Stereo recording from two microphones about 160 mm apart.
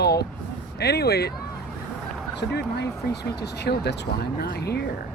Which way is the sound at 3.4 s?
90° left.